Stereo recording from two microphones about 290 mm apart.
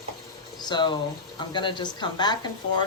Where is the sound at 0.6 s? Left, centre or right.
Centre.